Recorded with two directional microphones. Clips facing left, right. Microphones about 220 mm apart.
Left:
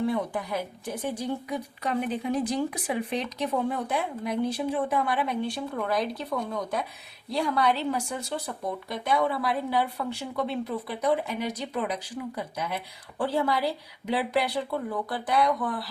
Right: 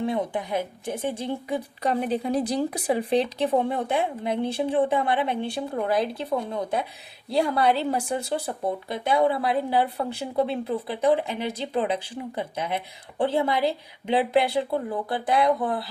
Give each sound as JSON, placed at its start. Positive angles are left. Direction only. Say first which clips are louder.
{"t": 0.1, "sound": "speech", "louder": "right 2 dB", "side_deg": -20}